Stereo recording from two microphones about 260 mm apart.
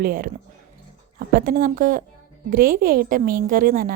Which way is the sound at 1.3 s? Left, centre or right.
Right.